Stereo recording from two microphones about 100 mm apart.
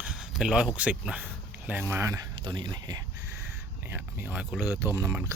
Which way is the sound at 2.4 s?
50° right (ahead or behind).